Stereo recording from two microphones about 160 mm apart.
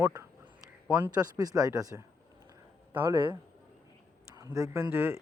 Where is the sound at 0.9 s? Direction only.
20° right (ahead or behind).